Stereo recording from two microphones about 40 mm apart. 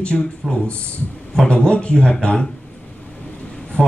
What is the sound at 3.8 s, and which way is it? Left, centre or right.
Speech, left.